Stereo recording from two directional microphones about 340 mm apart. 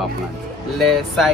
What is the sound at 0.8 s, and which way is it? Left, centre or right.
Speech, centre.